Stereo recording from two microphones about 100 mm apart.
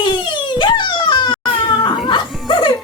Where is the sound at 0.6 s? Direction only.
50° left (ahead or behind).